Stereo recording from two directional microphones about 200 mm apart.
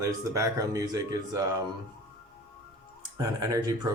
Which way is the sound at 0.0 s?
15° right (ahead or behind).